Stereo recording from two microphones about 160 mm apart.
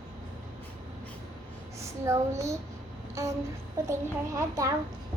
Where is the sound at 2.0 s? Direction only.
20° right (ahead or behind).